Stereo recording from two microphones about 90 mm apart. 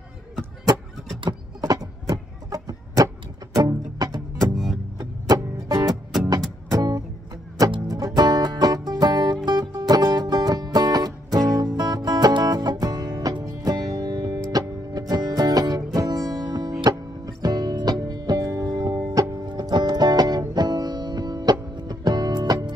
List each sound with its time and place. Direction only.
1.6 s music: 45° right (ahead or behind)
13.9 s music: 60° right (ahead or behind)
14.5 s music: 45° right (ahead or behind)